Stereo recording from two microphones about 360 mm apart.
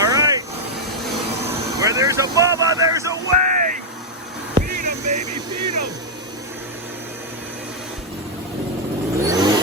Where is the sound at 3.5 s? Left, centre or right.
Right.